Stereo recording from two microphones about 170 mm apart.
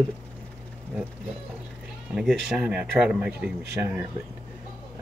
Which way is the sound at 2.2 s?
Centre (ahead or behind).